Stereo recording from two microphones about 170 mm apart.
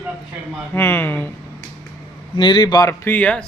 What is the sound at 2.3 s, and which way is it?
Speech, 25° left (ahead or behind).